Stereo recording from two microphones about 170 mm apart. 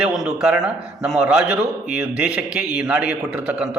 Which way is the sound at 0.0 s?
5° right (ahead or behind).